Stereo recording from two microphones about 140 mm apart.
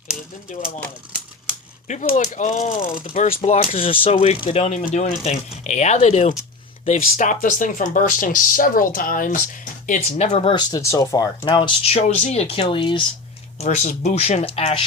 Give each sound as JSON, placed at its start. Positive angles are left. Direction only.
{"t": 1.9, "sound": "speech", "side_deg": 65}
{"t": 3.0, "sound": "speech", "side_deg": 70}
{"t": 3.4, "sound": "speech", "side_deg": 55}
{"t": 6.8, "sound": "speech", "side_deg": 65}
{"t": 11.4, "sound": "speech", "side_deg": 35}
{"t": 12.0, "sound": "speech", "side_deg": 55}
{"t": 13.6, "sound": "speech", "side_deg": 55}